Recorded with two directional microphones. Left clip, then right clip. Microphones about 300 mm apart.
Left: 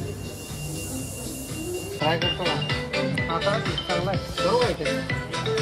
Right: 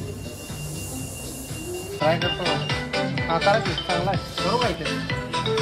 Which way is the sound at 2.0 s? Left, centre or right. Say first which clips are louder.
Right 2 dB; centre.